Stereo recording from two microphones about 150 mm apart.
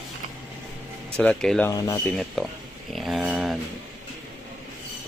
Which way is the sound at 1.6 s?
25° left (ahead or behind).